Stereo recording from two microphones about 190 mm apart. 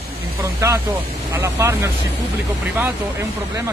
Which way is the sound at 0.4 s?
15° right (ahead or behind).